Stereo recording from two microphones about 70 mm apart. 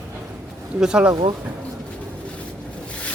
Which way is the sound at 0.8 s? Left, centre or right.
Centre.